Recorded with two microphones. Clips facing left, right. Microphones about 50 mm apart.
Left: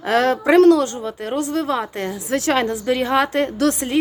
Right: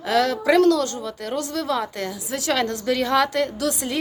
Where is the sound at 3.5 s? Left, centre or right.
Left.